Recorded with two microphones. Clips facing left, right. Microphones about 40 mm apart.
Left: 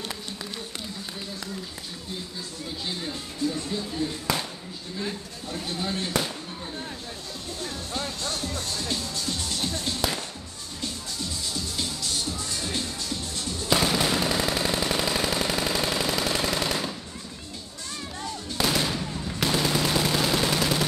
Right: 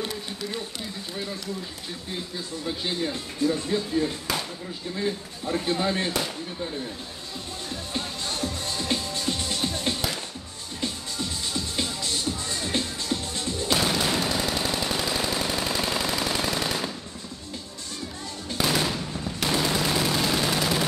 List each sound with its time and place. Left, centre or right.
3.1 s speech: right
5.5 s speech: right
8.4 s music: right
11.7 s music: right
13.8 s machine gun: centre
18.6 s gunshot: centre